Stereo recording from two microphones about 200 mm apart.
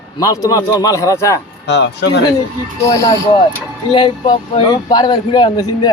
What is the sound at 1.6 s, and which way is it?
Speech, 60° left (ahead or behind).